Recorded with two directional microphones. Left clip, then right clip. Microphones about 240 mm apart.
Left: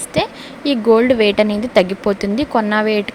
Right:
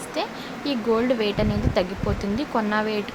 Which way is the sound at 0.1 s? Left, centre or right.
Left.